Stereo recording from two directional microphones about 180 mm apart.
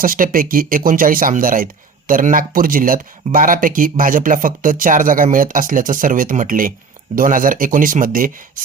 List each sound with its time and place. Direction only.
0.0 s speech: 50° right (ahead or behind)